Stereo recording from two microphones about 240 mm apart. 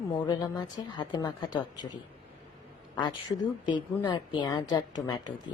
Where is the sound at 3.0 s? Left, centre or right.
Centre.